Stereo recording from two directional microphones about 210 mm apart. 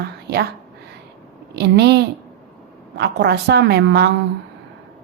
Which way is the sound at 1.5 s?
50° right (ahead or behind).